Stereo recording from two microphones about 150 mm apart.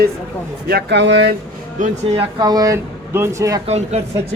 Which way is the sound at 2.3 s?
25° right (ahead or behind).